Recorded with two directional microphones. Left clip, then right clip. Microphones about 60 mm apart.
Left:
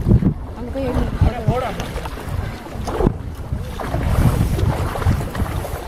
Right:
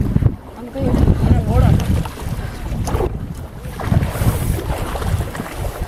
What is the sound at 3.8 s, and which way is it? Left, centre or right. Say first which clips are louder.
Boat: right 1 dB; right.